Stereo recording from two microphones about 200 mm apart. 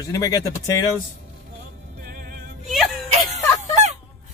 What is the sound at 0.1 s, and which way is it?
Speech, 15° left (ahead or behind).